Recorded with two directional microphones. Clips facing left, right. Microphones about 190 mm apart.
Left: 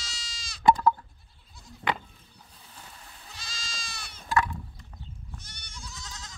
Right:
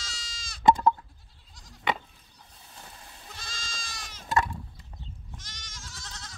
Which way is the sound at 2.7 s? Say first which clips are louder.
Right 1 dB; 25° right (ahead or behind).